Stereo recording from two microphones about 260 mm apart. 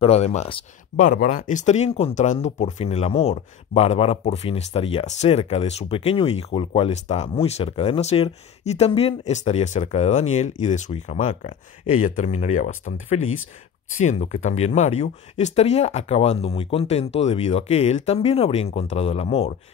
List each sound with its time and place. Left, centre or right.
0.0 s speech: left